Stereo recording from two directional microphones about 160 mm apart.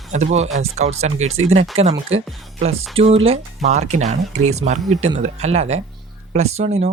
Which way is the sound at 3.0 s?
40° right (ahead or behind).